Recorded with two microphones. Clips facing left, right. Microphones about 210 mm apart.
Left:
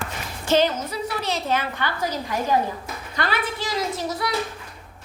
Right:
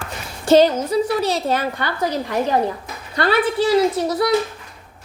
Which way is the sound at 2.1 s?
65° right (ahead or behind).